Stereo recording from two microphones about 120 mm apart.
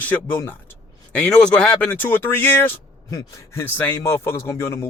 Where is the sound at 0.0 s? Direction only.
15° left (ahead or behind).